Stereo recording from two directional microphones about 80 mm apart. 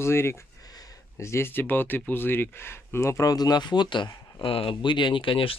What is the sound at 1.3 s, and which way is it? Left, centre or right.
Speech, left.